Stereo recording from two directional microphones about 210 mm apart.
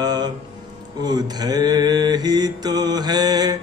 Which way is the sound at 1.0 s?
20° right (ahead or behind).